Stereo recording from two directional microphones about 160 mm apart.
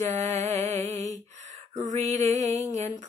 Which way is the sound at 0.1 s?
45° right (ahead or behind).